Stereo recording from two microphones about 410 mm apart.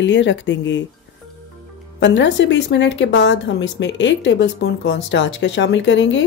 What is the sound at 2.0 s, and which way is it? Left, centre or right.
Speech, left.